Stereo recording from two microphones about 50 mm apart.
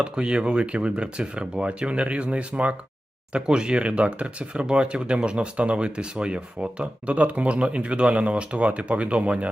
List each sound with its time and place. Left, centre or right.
0.0 s speech: centre